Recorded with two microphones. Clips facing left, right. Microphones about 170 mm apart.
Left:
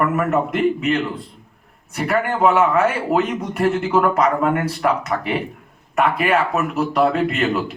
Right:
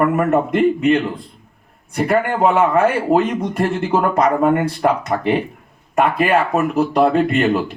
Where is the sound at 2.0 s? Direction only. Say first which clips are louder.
Right 2 dB; 35° right (ahead or behind).